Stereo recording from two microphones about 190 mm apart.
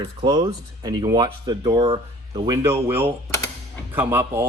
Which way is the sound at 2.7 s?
10° right (ahead or behind).